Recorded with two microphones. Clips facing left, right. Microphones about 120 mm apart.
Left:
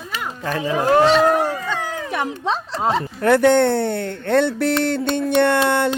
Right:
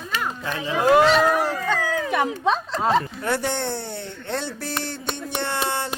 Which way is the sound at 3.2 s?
60° left (ahead or behind).